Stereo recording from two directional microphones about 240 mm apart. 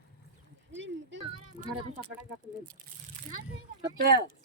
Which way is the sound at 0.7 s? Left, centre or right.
Right.